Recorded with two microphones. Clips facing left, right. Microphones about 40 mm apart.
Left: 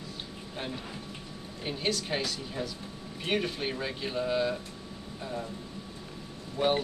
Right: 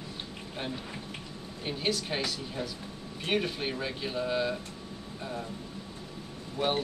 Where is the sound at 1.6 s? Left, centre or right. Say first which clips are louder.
Even; centre.